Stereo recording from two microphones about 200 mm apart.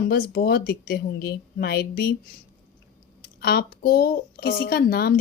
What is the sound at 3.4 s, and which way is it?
Speech, 50° left (ahead or behind).